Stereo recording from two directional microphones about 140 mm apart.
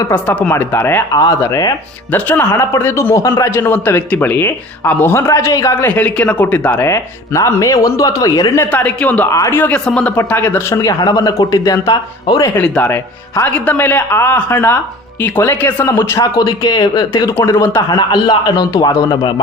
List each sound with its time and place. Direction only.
0.1 s speech: 10° left (ahead or behind)
1.1 s speech: 25° left (ahead or behind)
2.1 s speech: 15° left (ahead or behind)
6.0 s speech: 10° left (ahead or behind); by 12.5 s 30° left (ahead or behind)
12.5 s speech: 10° left (ahead or behind); by 19.3 s 30° left (ahead or behind)